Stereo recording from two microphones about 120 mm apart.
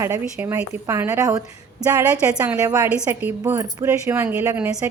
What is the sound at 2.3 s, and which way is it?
A woman's voice, 10° right (ahead or behind).